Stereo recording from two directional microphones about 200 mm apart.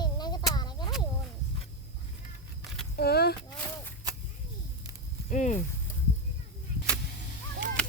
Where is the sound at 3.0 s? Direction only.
55° left (ahead or behind).